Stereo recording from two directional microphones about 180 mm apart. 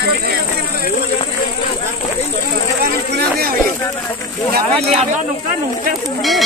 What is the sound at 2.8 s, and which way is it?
Speech, 60° right (ahead or behind).